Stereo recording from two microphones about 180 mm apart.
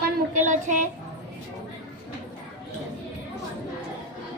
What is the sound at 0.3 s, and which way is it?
Child singing, 45° right (ahead or behind).